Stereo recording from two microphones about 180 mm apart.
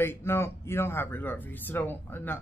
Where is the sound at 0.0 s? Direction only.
15° left (ahead or behind).